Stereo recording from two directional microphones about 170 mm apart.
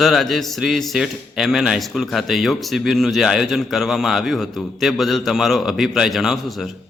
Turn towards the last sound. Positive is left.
turn(degrees=0)  # may be behind; listen again after turning